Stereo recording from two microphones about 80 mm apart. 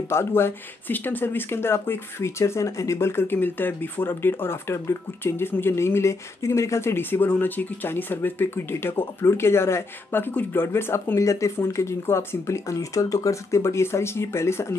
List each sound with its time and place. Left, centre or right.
0.1 s speech: left